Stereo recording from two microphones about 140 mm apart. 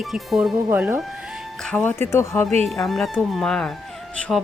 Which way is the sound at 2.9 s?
Centre (ahead or behind).